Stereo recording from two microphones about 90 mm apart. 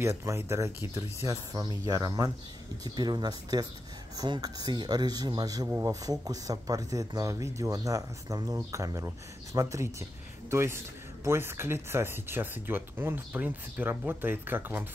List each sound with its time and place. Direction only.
0.4 s speech: 25° right (ahead or behind)
0.9 s speech: 35° right (ahead or behind)
5.7 s speech: 30° right (ahead or behind)
6.0 s speech: 40° right (ahead or behind); by 14.9 s 25° right (ahead or behind)